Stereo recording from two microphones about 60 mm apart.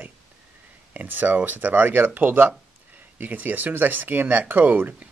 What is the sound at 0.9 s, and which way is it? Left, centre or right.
Speech, right.